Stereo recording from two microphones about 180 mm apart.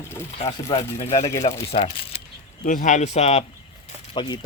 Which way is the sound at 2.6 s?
45° left (ahead or behind).